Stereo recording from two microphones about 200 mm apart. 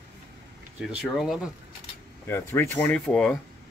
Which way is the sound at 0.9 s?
Centre (ahead or behind).